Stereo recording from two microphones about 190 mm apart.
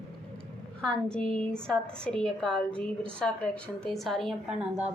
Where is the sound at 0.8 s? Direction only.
5° left (ahead or behind).